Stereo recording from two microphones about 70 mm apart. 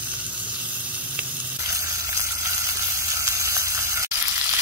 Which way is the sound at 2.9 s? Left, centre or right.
Right.